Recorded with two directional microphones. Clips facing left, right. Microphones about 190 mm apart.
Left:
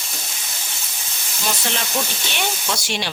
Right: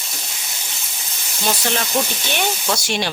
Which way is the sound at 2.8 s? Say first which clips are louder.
Right 4 dB; 50° right (ahead or behind).